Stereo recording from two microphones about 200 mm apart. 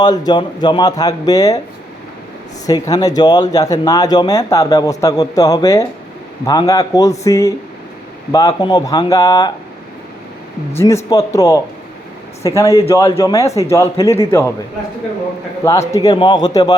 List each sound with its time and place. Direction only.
0.3 s speech: 20° left (ahead or behind)
2.6 s speech: 20° left (ahead or behind)
10.8 s speech: 15° left (ahead or behind)
15.6 s speech: 15° left (ahead or behind)